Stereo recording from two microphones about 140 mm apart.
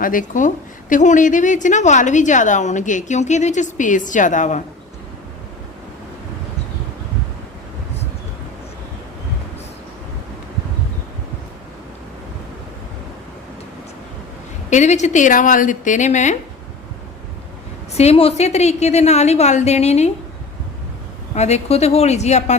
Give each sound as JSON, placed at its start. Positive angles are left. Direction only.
{"t": 0.0, "sound": "a woman's voice", "side_deg": 75}
{"t": 14.7, "sound": "a woman's voice", "side_deg": 55}
{"t": 17.9, "sound": "a woman's voice", "side_deg": 45}
{"t": 21.3, "sound": "a woman's voice", "side_deg": 50}